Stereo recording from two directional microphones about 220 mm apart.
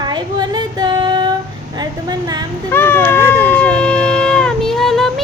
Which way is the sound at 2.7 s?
10° left (ahead or behind).